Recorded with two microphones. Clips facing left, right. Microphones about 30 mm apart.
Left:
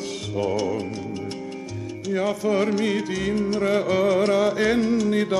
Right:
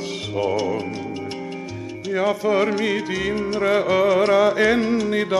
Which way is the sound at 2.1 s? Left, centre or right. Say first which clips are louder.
Right 3 dB; centre.